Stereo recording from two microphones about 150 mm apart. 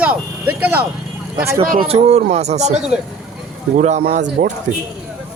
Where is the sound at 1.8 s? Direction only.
45° right (ahead or behind).